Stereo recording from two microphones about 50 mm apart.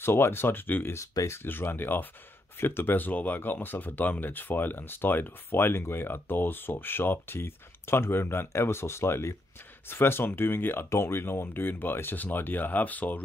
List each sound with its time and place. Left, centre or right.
0.0 s speech: left
0.9 s speech: left
1.4 s speech: left
10.9 s speech: left
11.4 s speech: left